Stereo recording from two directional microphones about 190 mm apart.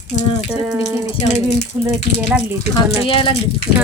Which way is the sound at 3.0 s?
30° left (ahead or behind).